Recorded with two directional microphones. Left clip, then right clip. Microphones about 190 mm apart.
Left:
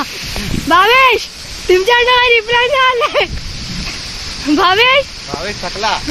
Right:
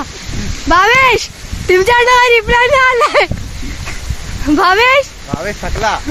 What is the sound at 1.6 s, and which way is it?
Speech, 20° right (ahead or behind).